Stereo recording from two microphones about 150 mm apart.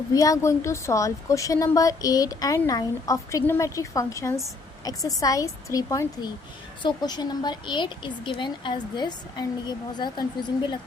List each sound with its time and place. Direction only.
0.1 s a woman's voice: 25° left (ahead or behind)